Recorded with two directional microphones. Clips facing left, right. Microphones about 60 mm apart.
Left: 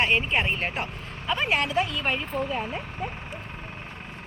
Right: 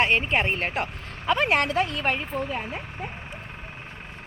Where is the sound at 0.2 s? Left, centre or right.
Right.